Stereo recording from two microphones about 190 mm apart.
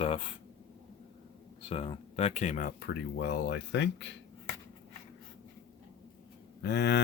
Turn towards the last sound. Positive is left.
turn(degrees=60)  # may be behind; listen again after turning